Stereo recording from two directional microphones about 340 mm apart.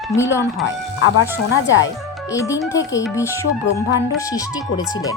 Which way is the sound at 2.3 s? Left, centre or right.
Centre.